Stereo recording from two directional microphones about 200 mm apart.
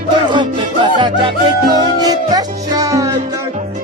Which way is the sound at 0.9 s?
25° right (ahead or behind).